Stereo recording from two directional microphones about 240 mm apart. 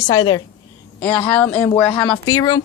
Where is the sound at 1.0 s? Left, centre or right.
Centre.